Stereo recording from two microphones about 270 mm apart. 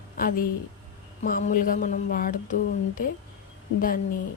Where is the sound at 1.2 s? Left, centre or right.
Left.